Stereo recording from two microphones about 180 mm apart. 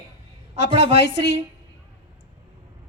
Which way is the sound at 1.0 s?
65° left (ahead or behind).